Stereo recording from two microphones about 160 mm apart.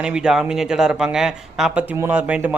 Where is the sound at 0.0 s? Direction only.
5° right (ahead or behind).